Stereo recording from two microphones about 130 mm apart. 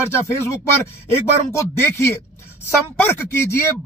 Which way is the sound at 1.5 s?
20° left (ahead or behind).